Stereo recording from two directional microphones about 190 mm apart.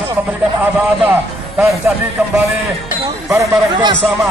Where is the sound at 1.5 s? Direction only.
5° right (ahead or behind).